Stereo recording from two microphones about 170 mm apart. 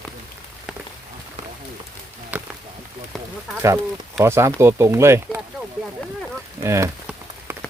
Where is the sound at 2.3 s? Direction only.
10° right (ahead or behind).